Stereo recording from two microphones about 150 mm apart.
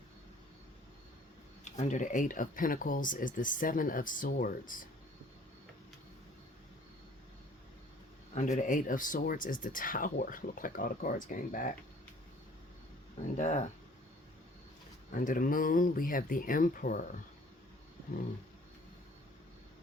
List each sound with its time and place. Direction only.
1.6 s speech: 50° left (ahead or behind)
8.4 s speech: 55° left (ahead or behind)
13.3 s speech: 50° left (ahead or behind)
15.1 s speech: 60° left (ahead or behind)